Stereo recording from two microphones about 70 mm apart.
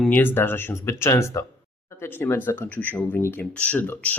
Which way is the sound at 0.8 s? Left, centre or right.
Left.